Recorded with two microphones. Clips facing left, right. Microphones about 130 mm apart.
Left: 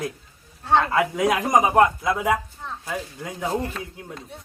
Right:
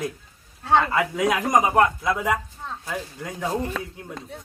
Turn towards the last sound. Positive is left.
turn(degrees=5)  # may be behind; listen again after turning